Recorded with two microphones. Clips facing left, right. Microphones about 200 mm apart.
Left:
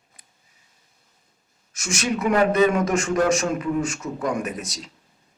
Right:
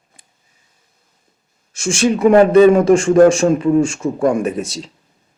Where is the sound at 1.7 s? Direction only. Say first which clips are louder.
Right 9 dB; 30° right (ahead or behind).